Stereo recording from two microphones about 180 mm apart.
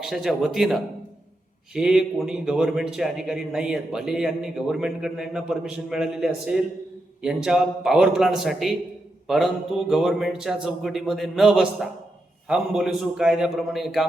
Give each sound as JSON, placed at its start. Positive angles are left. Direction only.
{"t": 0.0, "sound": "a man's voice", "side_deg": 0}